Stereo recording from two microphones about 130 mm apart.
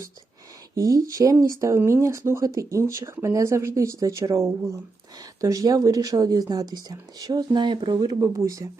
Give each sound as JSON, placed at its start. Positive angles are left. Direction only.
{"t": 0.8, "sound": "speech", "side_deg": -25}